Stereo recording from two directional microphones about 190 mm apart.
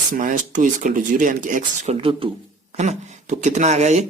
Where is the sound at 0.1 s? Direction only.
45° right (ahead or behind).